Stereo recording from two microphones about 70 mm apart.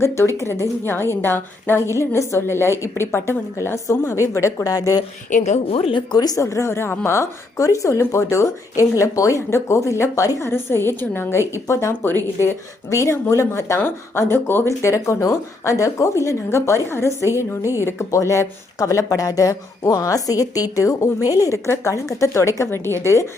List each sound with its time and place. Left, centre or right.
0.0 s a woman's voice: left
2.0 s a woman's voice: left
4.7 s a woman's voice: left
6.1 s a woman's voice: left
6.4 s a woman's voice: left